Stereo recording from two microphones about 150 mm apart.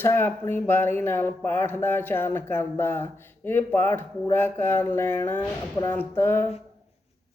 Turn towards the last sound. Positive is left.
turn(degrees=15)  # may be behind; listen again after turning